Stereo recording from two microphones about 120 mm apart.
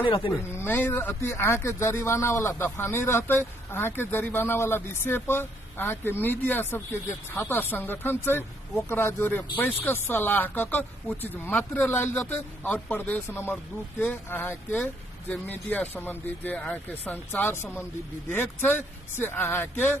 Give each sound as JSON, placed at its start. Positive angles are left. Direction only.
{"t": 0.0, "sound": "speech", "side_deg": 45}
{"t": 0.3, "sound": "speech", "side_deg": 20}